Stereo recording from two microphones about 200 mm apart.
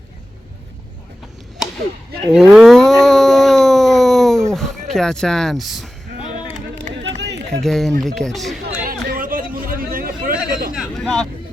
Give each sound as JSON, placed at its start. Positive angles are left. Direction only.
{"t": 2.3, "sound": "dog", "side_deg": 0}
{"t": 7.0, "sound": "run", "side_deg": -60}
{"t": 7.6, "sound": "speech", "side_deg": 0}
{"t": 8.8, "sound": "chatter", "side_deg": -45}
{"t": 10.8, "sound": "vehicle", "side_deg": 0}